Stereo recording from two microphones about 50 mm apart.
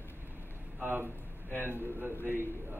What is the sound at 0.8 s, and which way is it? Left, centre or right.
Speech, right.